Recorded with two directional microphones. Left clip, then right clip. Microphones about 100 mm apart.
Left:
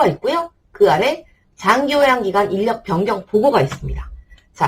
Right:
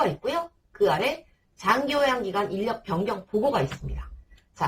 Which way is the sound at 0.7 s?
20° left (ahead or behind).